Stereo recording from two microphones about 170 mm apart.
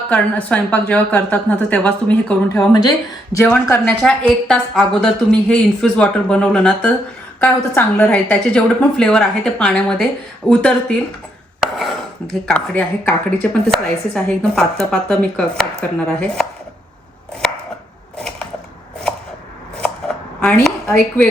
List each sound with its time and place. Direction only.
0.1 s a woman's voice: 5° left (ahead or behind)
2.6 s a woman's voice: 25° left (ahead or behind)
3.3 s a woman's voice: 15° left (ahead or behind)
11.8 s a woman's voice: centre (ahead or behind)
20.4 s a woman's voice: 5° left (ahead or behind)